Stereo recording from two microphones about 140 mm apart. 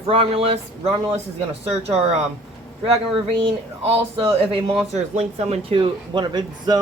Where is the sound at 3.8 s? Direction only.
45° right (ahead or behind).